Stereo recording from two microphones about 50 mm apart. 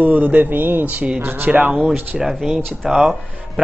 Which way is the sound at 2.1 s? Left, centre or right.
Centre.